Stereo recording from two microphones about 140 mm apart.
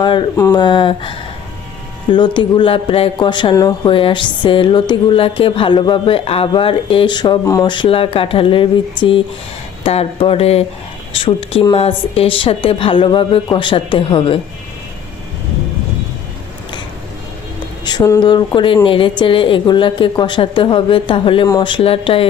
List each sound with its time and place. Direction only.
0.0 s speech: 35° left (ahead or behind)
3.5 s speech: 25° left (ahead or behind)
3.8 s speech: 35° left (ahead or behind)
17.8 s speech: 30° left (ahead or behind)